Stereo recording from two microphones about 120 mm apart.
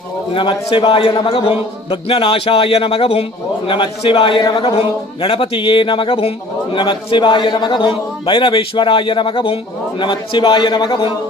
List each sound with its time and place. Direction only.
0.3 s a man's voice: 45° left (ahead or behind)